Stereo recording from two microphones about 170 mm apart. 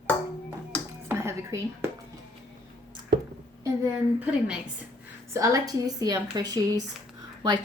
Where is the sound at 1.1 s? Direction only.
15° right (ahead or behind).